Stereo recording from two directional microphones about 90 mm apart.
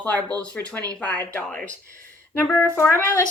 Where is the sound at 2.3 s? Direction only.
30° left (ahead or behind).